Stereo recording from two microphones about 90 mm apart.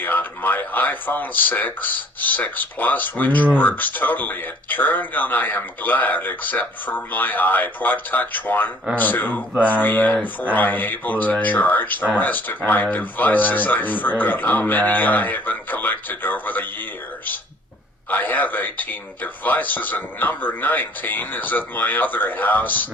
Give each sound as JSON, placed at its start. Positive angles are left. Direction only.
{"t": 0.0, "sound": "speech", "side_deg": 20}
{"t": 18.1, "sound": "speech", "side_deg": 20}